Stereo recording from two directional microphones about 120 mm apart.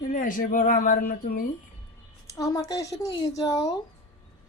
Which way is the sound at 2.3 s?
30° left (ahead or behind).